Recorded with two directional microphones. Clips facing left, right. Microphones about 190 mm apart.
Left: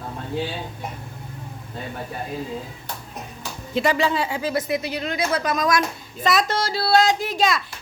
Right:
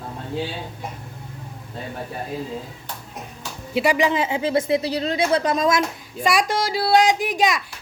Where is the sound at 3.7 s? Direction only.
10° right (ahead or behind); by 5.8 s 30° right (ahead or behind).